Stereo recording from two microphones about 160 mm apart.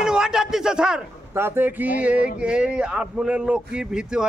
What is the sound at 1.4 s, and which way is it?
Speech, 15° right (ahead or behind).